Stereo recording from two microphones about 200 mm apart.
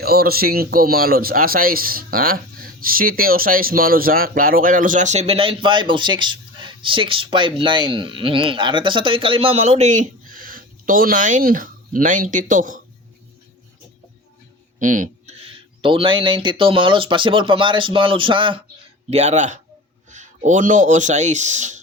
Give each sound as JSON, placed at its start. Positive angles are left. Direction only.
{"t": 0.0, "sound": "speech", "side_deg": -50}
{"t": 14.8, "sound": "speech", "side_deg": -40}